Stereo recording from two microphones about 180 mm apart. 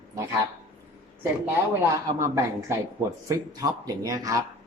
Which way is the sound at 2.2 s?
15° right (ahead or behind).